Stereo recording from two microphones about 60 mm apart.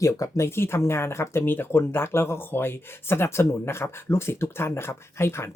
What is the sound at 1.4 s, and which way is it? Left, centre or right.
Speech, left.